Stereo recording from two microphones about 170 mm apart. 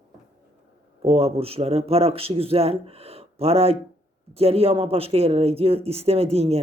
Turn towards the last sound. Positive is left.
turn(degrees=-35)  # may be behind; listen again after turning